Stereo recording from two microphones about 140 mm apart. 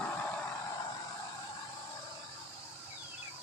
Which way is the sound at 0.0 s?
10° left (ahead or behind).